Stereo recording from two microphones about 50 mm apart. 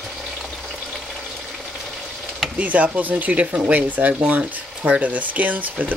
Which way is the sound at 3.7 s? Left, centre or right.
Right.